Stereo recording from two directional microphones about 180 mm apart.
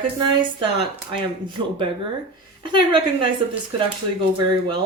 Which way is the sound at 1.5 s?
30° right (ahead or behind).